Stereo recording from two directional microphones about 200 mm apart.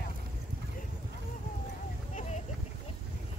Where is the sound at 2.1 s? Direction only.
35° left (ahead or behind).